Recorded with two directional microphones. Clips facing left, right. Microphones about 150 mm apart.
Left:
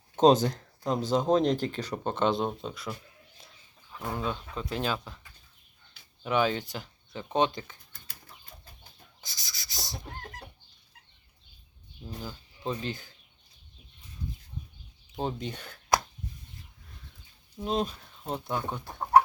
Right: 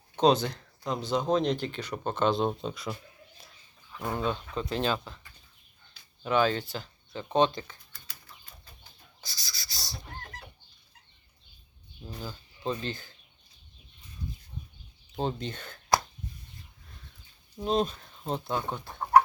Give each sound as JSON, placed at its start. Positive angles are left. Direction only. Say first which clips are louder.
{"t": 0.2, "sound": "speech", "louder": "left 3 dB", "side_deg": 40}
{"t": 2.0, "sound": "speech", "louder": "even", "side_deg": 20}
{"t": 2.6, "sound": "speech", "louder": "right 2 dB", "side_deg": 0}
{"t": 4.0, "sound": "speech", "louder": "right 2 dB", "side_deg": 0}
{"t": 6.2, "sound": "speech", "louder": "right 1 dB", "side_deg": 15}
{"t": 9.2, "sound": "rub", "louder": "right 2 dB", "side_deg": 15}
{"t": 12.2, "sound": "speech", "louder": "right 2 dB", "side_deg": 10}
{"t": 15.1, "sound": "speech", "louder": "right 1 dB", "side_deg": 10}
{"t": 17.6, "sound": "speech", "louder": "right 2 dB", "side_deg": 5}
{"t": 18.3, "sound": "speech", "louder": "right 1 dB", "side_deg": -25}